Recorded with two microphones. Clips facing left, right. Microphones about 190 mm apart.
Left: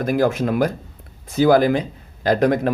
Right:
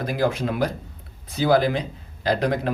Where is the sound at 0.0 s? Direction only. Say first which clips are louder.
Left 5 dB; 50° left (ahead or behind).